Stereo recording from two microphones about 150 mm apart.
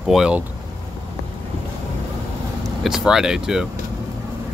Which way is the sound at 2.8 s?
5° right (ahead or behind).